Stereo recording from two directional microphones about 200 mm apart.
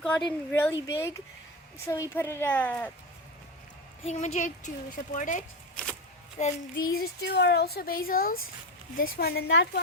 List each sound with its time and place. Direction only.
0.0 s a woman's voice: 5° left (ahead or behind)
4.0 s a woman's voice: 35° left (ahead or behind)
5.7 s a sound: 5° left (ahead or behind)
6.4 s a woman's voice: 35° left (ahead or behind)
6.9 s speech: 50° left (ahead or behind)